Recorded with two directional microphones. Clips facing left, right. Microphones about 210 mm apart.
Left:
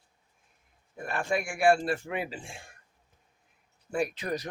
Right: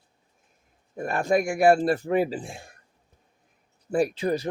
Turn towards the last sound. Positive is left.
turn(degrees=-30)  # may be behind; listen again after turning